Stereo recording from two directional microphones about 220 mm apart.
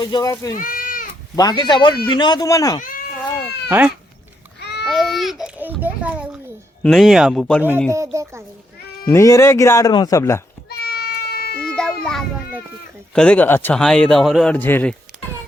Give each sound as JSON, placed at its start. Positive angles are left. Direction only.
{"t": 0.0, "sound": "speech", "side_deg": 15}
{"t": 0.5, "sound": "a sound", "side_deg": 40}
{"t": 1.4, "sound": "speech", "side_deg": 20}
{"t": 2.8, "sound": "cat", "side_deg": 40}
{"t": 3.7, "sound": "speech", "side_deg": -5}
{"t": 4.6, "sound": "babbling", "side_deg": 50}
{"t": 4.9, "sound": "baby cry", "side_deg": 0}
{"t": 6.8, "sound": "speech", "side_deg": 0}
{"t": 7.9, "sound": "speech", "side_deg": -15}
{"t": 9.0, "sound": "speech", "side_deg": 15}
{"t": 10.8, "sound": "a sound", "side_deg": 45}
{"t": 11.7, "sound": "a sound", "side_deg": 5}
{"t": 13.1, "sound": "speech", "side_deg": 5}